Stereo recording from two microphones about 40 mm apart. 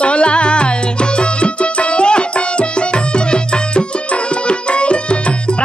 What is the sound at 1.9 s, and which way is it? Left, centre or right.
Music, left.